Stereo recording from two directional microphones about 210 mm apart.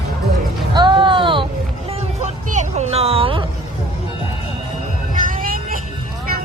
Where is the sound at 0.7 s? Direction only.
20° right (ahead or behind).